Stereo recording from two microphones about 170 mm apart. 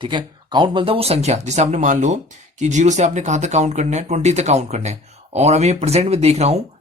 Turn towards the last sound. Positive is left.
turn(degrees=-40)  # may be behind; listen again after turning